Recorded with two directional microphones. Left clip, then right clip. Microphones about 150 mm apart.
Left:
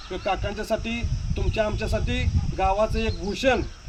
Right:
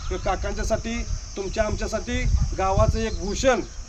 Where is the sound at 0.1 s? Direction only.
15° left (ahead or behind).